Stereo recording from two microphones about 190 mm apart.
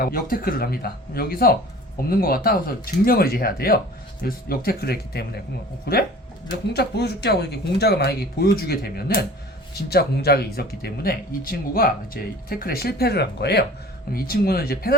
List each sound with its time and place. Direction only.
0.0 s speech: 50° left (ahead or behind)